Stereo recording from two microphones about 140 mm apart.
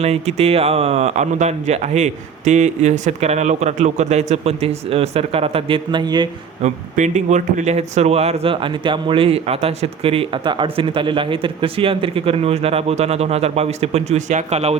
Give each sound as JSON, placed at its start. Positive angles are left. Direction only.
{"t": 0.0, "sound": "speech", "side_deg": -50}
{"t": 6.6, "sound": "speech", "side_deg": -60}